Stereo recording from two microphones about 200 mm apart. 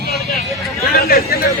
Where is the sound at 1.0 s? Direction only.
50° left (ahead or behind).